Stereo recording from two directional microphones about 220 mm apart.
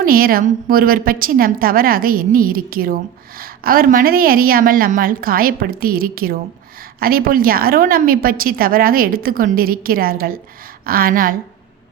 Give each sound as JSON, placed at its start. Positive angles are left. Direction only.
{"t": 0.0, "sound": "a woman's voice", "side_deg": -40}